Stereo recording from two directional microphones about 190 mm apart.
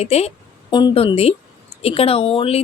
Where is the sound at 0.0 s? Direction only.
35° left (ahead or behind).